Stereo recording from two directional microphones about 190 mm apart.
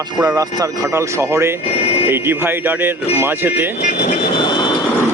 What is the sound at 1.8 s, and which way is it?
Speech, 30° left (ahead or behind).